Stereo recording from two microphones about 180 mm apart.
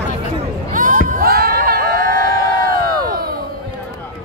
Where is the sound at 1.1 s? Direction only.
55° right (ahead or behind).